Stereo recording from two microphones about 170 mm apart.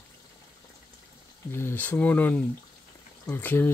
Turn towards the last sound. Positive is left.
turn(degrees=10)  # may be behind; listen again after turning